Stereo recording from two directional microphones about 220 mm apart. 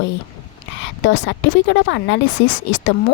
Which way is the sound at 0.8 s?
55° left (ahead or behind).